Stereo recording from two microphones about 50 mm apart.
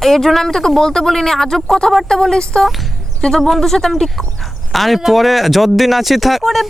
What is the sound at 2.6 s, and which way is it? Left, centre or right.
Music, centre.